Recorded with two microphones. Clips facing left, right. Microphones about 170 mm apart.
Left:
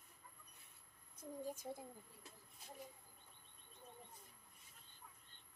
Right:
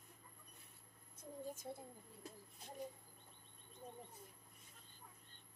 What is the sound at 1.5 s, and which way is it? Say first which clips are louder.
Speech: even; 15° left (ahead or behind).